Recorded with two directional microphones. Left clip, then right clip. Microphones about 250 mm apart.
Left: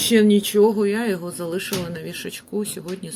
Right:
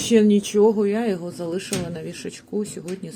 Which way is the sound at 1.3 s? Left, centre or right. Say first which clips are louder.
Left 1 dB; left.